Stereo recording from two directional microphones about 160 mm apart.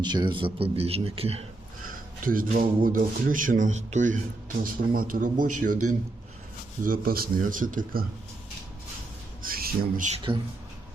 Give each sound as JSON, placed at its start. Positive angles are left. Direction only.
{"t": 0.0, "sound": "speech", "side_deg": -25}
{"t": 2.2, "sound": "speech", "side_deg": -60}
{"t": 9.4, "sound": "squawk", "side_deg": -65}
{"t": 10.3, "sound": "speech", "side_deg": -30}